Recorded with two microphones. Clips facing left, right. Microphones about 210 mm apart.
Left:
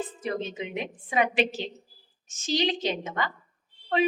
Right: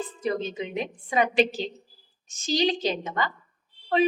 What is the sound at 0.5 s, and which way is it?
Speech, 35° right (ahead or behind).